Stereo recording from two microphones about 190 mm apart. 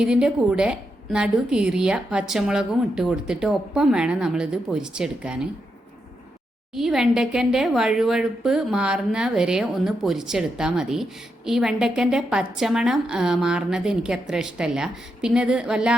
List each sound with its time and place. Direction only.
0.0 s a woman's voice: 5° right (ahead or behind)
6.7 s a woman's voice: centre (ahead or behind)